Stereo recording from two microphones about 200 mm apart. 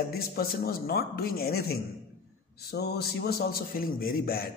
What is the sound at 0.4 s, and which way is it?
A man's voice, 50° left (ahead or behind).